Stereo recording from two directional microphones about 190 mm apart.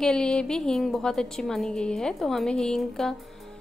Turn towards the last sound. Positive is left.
turn(degrees=5)  # may be behind; listen again after turning